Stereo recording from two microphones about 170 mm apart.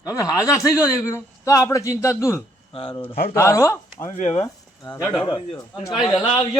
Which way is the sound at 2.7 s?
30° left (ahead or behind).